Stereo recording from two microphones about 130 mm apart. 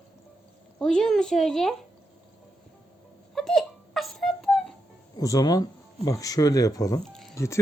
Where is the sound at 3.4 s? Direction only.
Centre (ahead or behind).